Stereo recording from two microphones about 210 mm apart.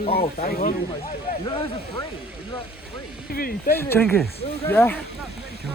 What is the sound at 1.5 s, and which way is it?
Speech, 25° left (ahead or behind).